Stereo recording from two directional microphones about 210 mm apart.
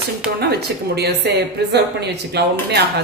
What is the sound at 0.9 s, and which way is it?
A woman's voice, 50° right (ahead or behind).